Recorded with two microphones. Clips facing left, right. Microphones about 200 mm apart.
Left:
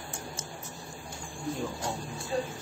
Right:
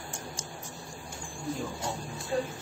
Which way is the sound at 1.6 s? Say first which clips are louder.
Left 1 dB; 10° left (ahead or behind).